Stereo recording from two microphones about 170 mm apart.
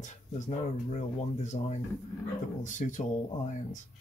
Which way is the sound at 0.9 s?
45° left (ahead or behind).